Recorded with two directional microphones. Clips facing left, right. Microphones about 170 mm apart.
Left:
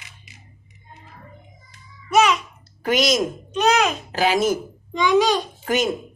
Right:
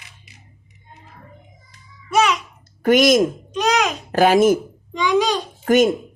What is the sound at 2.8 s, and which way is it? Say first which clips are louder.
Speech: right 6 dB; 50° right (ahead or behind).